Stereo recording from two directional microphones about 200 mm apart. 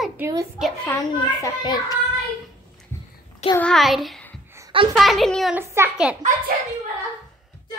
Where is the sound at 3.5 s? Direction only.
5° left (ahead or behind).